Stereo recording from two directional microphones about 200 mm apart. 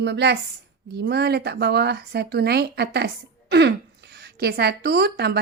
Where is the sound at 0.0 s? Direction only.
60° right (ahead or behind).